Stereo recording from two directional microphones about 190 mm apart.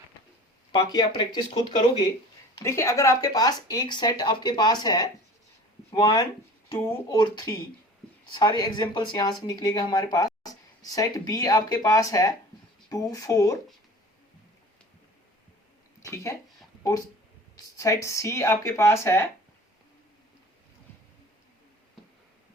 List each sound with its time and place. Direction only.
0.7 s speech: 25° left (ahead or behind)
2.6 s speech: 15° left (ahead or behind)
16.0 s speech: 15° left (ahead or behind)
17.7 s speech: 15° left (ahead or behind)